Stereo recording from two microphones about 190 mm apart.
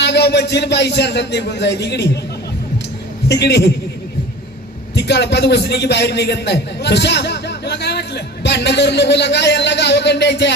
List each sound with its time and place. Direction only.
0.0 s a man's voice: 60° left (ahead or behind)
3.2 s a man's voice: 60° left (ahead or behind)
4.9 s a man's voice: 65° left (ahead or behind)